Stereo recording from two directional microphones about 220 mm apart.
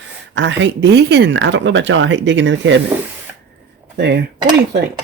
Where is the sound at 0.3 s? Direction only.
55° right (ahead or behind).